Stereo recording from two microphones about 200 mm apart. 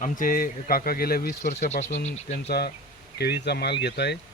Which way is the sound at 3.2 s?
55° left (ahead or behind).